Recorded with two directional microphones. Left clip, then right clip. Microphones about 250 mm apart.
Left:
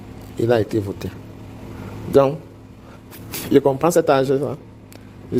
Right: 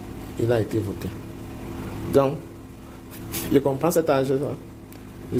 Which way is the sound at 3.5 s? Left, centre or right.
Left.